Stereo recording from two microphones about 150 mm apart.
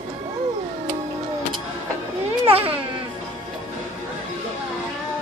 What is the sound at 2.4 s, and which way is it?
Baby cry, 40° right (ahead or behind).